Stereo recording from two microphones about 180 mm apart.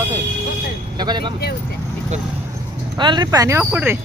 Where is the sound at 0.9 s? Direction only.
25° right (ahead or behind).